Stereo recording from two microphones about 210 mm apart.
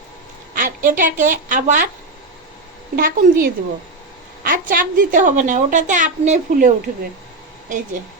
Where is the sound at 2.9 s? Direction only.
40° right (ahead or behind).